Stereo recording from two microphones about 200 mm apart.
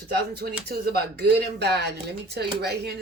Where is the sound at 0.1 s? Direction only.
55° right (ahead or behind).